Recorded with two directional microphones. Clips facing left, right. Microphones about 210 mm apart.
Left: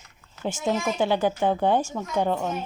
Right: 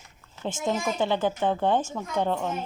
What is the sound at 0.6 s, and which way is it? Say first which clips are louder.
A child's voice: left 2 dB; 5° left (ahead or behind).